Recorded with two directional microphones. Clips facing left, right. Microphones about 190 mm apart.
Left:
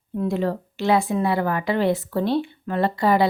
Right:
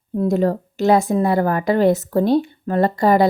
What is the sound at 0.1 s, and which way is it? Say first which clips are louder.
A woman's voice: right 5 dB; 40° right (ahead or behind).